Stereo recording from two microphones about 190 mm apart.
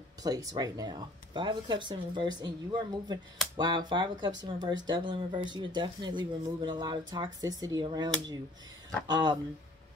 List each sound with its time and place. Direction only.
0.2 s speech: 20° right (ahead or behind)